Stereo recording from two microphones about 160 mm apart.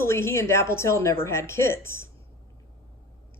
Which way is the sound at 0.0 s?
15° left (ahead or behind).